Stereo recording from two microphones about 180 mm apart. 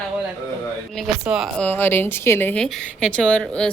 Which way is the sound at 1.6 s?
10° left (ahead or behind).